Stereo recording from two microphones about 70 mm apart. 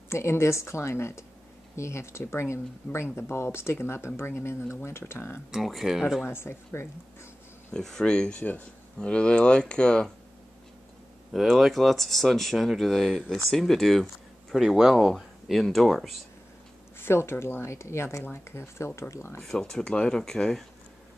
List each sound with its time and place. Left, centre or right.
0.1 s speech: left
5.5 s speech: centre
6.2 s speech: left
7.7 s speech: centre
11.3 s speech: centre
17.0 s speech: left
19.4 s speech: centre